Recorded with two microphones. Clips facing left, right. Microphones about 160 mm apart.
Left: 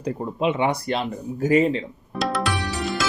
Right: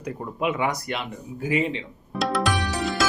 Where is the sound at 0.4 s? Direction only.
30° left (ahead or behind).